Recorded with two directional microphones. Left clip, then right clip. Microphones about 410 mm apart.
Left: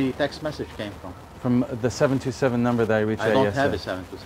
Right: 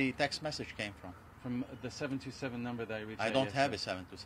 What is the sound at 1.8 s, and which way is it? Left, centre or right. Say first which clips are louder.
Speech: left 18 dB; left.